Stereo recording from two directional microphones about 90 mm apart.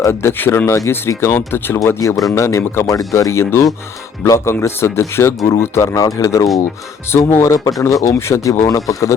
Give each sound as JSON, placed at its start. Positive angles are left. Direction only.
{"t": 0.0, "sound": "speech", "side_deg": 30}